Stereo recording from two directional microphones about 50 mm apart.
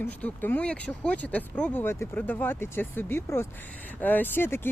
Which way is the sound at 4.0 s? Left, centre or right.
Left.